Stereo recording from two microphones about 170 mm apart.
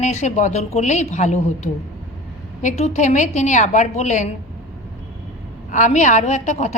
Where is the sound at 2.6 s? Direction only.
45° left (ahead or behind).